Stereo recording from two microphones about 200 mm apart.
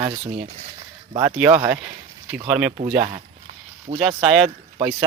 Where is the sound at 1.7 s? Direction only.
10° right (ahead or behind).